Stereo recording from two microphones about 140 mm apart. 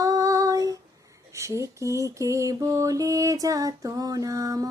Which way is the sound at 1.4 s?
20° right (ahead or behind).